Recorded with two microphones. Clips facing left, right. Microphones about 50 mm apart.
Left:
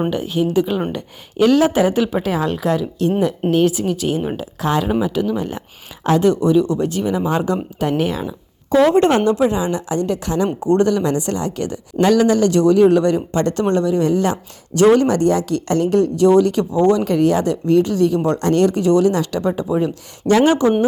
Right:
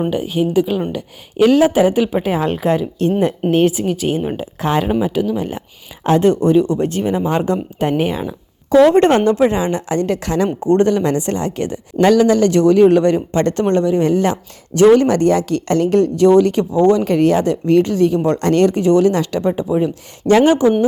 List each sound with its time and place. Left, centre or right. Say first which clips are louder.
0.1 s a woman's voice: right 1 dB; centre; by 4.9 s right
4.9 s a woman's voice: right 1 dB; right
6.1 s speech: right 2 dB; right
8.9 s a woman's voice: right 2 dB; right
10.7 s a woman's voice: right 2 dB; right
17.7 s a woman's voice: right 1 dB; right
17.9 s speech: right 2 dB; right
18.3 s a woman's voice: right 2 dB; right
18.7 s speech: right 2 dB; right
19.4 s a woman's voice: right 2 dB; right